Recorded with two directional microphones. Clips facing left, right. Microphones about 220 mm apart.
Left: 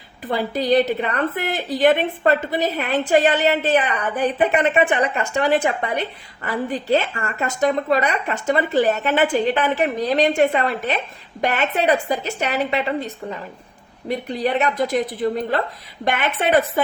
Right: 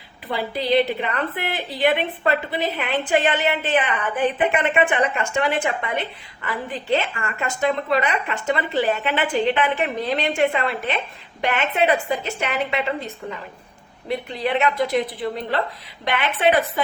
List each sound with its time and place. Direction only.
0.3 s a woman's voice: 45° left (ahead or behind)